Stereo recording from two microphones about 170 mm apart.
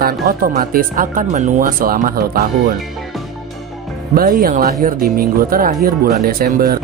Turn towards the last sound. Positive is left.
turn(degrees=-60)  # may be behind; listen again after turning